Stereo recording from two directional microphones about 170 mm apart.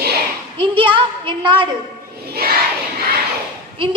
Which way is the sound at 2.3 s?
65° right (ahead or behind).